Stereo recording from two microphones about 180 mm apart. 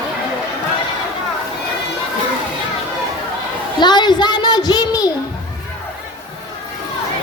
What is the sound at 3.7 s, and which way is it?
A woman's voice, 25° left (ahead or behind).